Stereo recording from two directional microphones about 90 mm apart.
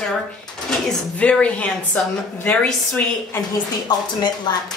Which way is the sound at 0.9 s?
10° left (ahead or behind).